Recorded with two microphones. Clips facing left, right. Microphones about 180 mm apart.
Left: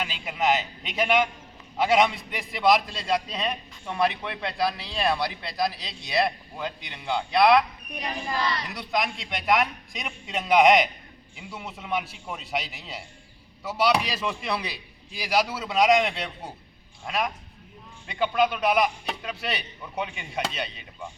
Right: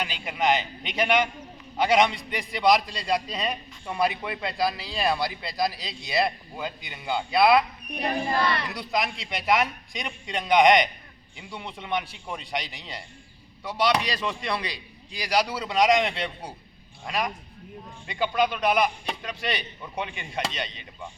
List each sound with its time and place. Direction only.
0.0 s a man's voice: centre (ahead or behind)
8.0 s crowd: 55° right (ahead or behind)
8.7 s a man's voice: centre (ahead or behind)